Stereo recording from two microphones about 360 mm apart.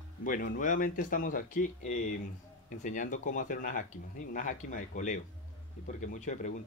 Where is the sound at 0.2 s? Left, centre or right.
Left.